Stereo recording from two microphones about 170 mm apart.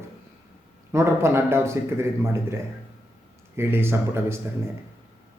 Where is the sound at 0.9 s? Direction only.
15° right (ahead or behind).